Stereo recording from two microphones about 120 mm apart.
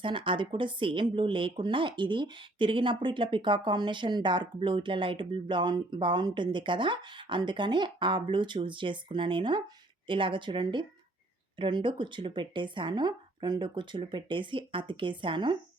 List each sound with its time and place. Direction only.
0.0 s speech: 45° right (ahead or behind)